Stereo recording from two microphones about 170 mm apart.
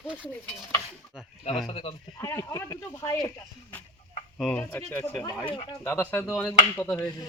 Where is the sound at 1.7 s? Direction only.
35° left (ahead or behind).